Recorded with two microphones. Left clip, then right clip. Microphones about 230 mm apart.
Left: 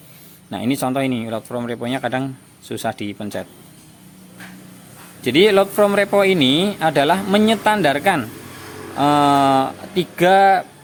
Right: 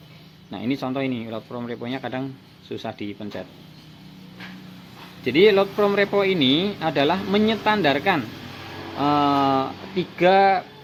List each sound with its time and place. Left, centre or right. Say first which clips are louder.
0.5 s speech: left 6 dB; left
5.2 s speech: left 3 dB; left